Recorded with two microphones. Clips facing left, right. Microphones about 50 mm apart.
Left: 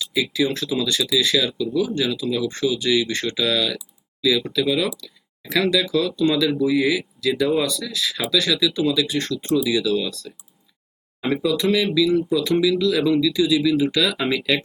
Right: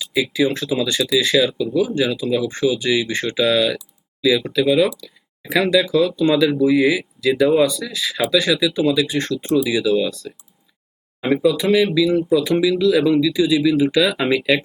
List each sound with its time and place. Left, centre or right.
0.0 s speech: centre
11.2 s speech: centre